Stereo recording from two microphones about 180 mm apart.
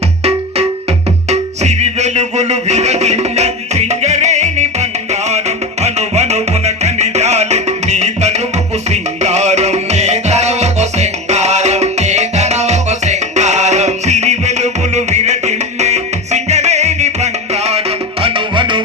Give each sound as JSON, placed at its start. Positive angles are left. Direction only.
{"t": 1.3, "sound": "music", "side_deg": -40}